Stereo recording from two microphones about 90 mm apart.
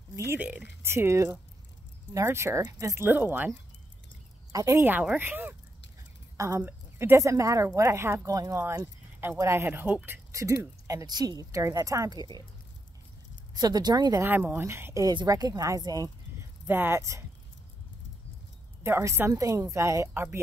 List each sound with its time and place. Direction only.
0.4 s speech: 15° right (ahead or behind)
0.8 s speech: 30° right (ahead or behind)
3.1 s speech: 20° right (ahead or behind)
4.5 s speech: 40° right (ahead or behind)
4.8 s speech: 20° right (ahead or behind)
6.3 s a woman's voice: 40° right (ahead or behind)
6.6 s speech: 25° right (ahead or behind)
9.4 s speech: 30° right (ahead or behind)
10.3 s speech: 35° right (ahead or behind)
13.6 s speech: 50° right (ahead or behind)
14.2 s speech: 25° right (ahead or behind)
15.2 s speech: 45° right (ahead or behind)
16.6 s speech: 20° right (ahead or behind)
18.8 s speech: 30° right (ahead or behind)